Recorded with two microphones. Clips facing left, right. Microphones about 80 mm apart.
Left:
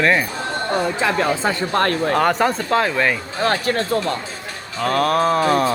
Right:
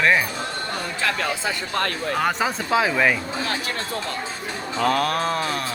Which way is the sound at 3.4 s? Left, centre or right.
Left.